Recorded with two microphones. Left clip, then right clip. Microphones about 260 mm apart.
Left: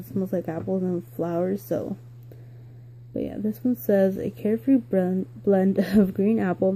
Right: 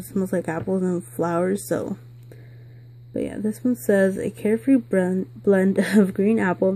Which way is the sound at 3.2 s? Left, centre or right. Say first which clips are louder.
Right 3 dB; centre.